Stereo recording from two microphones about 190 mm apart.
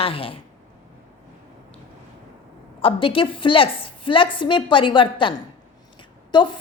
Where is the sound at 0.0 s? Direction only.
30° left (ahead or behind).